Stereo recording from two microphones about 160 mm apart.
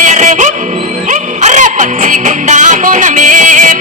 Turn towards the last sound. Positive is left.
turn(degrees=-50)  # may be behind; listen again after turning